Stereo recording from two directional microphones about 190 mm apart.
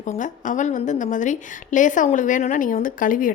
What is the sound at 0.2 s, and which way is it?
A woman's voice, 40° left (ahead or behind).